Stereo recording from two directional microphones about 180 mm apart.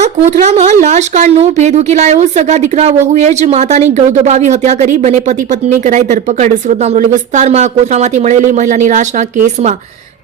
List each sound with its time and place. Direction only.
0.0 s speech: 40° right (ahead or behind)